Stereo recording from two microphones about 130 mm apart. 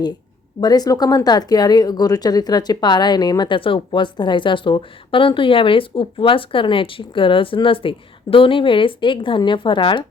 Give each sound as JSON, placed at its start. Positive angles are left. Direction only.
{"t": 0.6, "sound": "speech", "side_deg": 30}